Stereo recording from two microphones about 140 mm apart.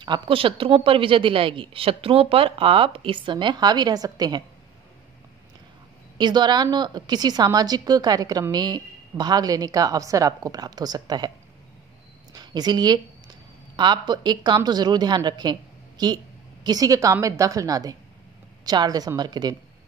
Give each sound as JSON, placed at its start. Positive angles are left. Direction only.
{"t": 0.0, "sound": "a woman's voice", "side_deg": -35}
{"t": 6.1, "sound": "a woman's voice", "side_deg": -30}